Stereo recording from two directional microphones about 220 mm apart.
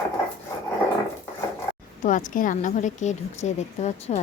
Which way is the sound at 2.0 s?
35° left (ahead or behind).